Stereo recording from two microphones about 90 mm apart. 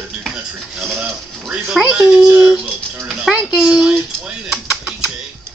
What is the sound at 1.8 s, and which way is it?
Speech, 10° right (ahead or behind).